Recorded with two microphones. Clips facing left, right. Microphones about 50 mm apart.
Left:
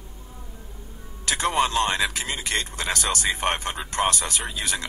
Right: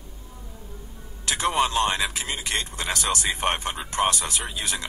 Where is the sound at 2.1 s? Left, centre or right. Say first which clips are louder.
Left 1 dB; left.